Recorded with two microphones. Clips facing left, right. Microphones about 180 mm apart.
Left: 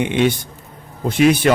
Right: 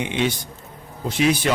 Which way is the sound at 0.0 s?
55° left (ahead or behind).